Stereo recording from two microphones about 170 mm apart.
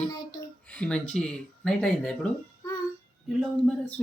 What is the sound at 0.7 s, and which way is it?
Speech, 5° left (ahead or behind).